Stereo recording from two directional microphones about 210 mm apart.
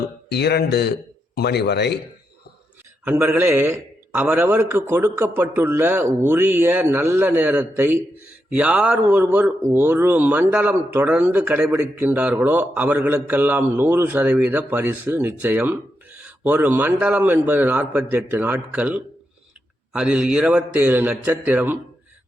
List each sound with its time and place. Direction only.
0.3 s speech: 50° left (ahead or behind)
3.0 s a man's voice: 10° right (ahead or behind)